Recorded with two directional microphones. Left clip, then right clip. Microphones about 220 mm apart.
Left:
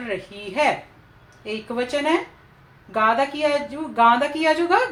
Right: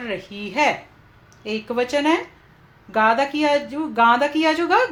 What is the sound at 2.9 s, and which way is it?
A woman's voice, 45° right (ahead or behind).